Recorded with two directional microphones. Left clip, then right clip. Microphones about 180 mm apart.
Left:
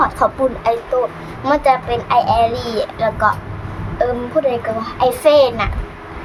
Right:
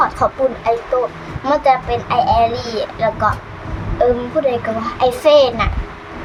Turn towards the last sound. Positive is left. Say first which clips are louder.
# right 1 dB
turn(degrees=10)  # may be behind; listen again after turning